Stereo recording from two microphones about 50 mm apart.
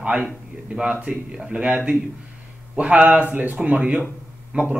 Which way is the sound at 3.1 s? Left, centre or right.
Right.